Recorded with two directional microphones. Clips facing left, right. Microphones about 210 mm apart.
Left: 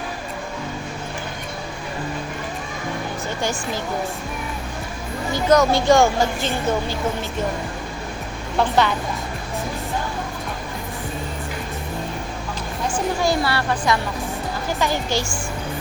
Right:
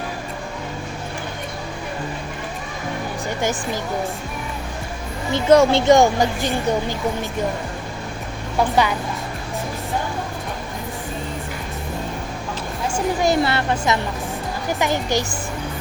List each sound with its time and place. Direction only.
3.2 s speech: 15° right (ahead or behind)
5.3 s a woman's voice: 25° right (ahead or behind)
8.5 s speech: 10° right (ahead or behind)
12.9 s a woman's voice: 20° right (ahead or behind)